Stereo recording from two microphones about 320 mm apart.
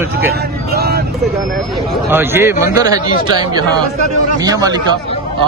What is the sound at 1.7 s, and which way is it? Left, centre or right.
Speech, centre.